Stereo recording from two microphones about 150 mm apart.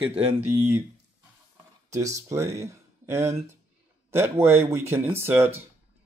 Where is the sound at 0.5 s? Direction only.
15° right (ahead or behind).